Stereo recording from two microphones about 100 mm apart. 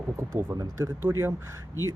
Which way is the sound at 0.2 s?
25° right (ahead or behind).